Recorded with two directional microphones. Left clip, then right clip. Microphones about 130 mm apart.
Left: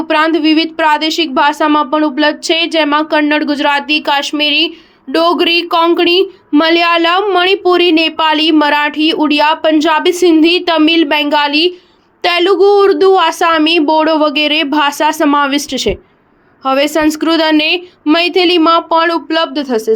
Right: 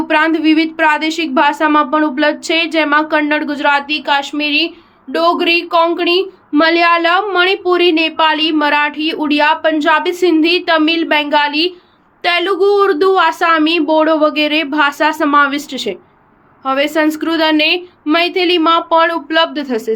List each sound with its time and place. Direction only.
0.1 s a woman's voice: 30° left (ahead or behind)
3.7 s speech: 75° left (ahead or behind); by 4.7 s 90° left
5.1 s a woman's voice: 75° left (ahead or behind); by 19.9 s 40° left (ahead or behind)